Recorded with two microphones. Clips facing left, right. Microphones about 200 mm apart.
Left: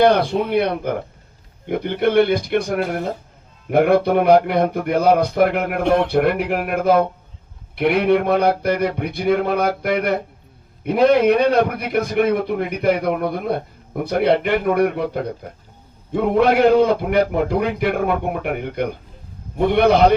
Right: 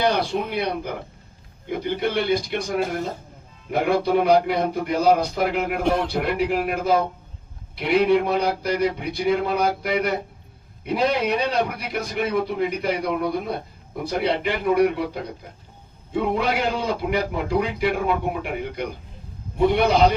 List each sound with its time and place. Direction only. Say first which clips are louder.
0.0 s a man's voice: left 7 dB; 55° left (ahead or behind)